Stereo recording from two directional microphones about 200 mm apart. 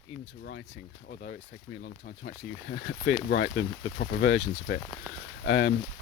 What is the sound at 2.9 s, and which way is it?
Speech, 55° left (ahead or behind).